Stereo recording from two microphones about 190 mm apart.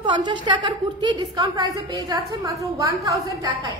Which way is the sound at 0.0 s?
25° right (ahead or behind).